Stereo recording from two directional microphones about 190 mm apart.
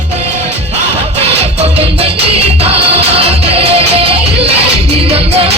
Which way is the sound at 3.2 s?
30° right (ahead or behind).